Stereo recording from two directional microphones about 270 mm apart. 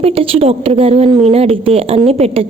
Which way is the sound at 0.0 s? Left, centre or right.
Right.